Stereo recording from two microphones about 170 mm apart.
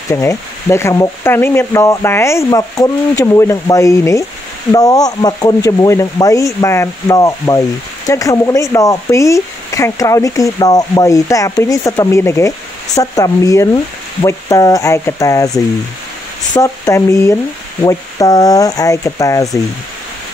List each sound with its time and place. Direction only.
0.1 s speech: 15° left (ahead or behind)
16.5 s speech: 15° left (ahead or behind)